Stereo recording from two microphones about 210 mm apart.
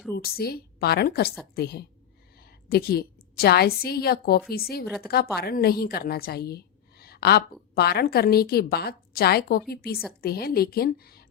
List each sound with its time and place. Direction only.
0.3 s a woman's voice: 45° left (ahead or behind)